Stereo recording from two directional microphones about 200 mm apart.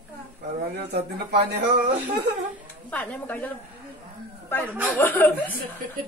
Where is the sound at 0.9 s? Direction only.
55° right (ahead or behind).